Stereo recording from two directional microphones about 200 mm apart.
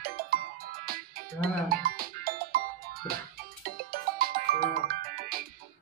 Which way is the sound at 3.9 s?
50° right (ahead or behind).